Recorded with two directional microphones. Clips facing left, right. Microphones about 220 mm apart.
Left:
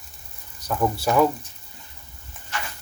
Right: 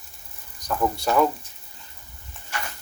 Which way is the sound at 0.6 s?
5° left (ahead or behind).